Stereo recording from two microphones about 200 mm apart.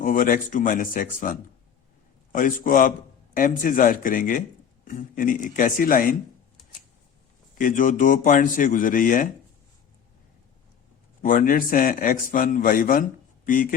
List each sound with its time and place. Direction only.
0.0 s a man's voice: 40° left (ahead or behind)
7.5 s a man's voice: 40° left (ahead or behind)
11.2 s a man's voice: 45° left (ahead or behind)